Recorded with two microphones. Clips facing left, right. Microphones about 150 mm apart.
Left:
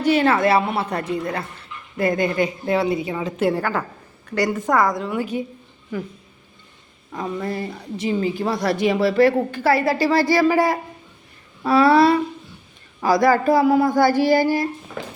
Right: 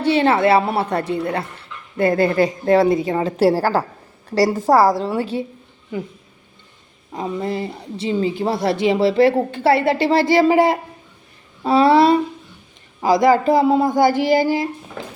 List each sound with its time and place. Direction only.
0.0 s a woman's voice: 30° right (ahead or behind)
7.1 s a woman's voice: 25° right (ahead or behind)